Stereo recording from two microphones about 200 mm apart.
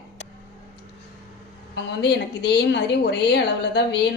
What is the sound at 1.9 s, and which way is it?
A woman's voice, 60° left (ahead or behind).